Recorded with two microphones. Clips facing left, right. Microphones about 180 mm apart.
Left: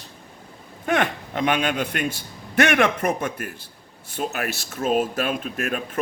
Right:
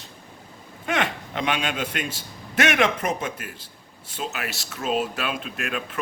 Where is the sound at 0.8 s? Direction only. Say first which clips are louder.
Left 3 dB; 50° left (ahead or behind).